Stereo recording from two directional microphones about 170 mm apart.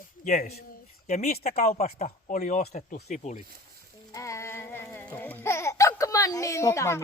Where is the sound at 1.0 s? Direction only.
40° left (ahead or behind).